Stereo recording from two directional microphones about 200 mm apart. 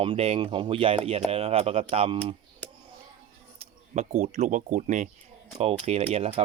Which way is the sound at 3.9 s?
35° right (ahead or behind).